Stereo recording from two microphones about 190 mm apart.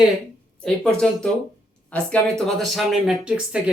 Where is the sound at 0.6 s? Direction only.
5° left (ahead or behind).